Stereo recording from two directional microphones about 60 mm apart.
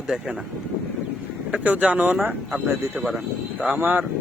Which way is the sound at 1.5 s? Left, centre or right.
Right.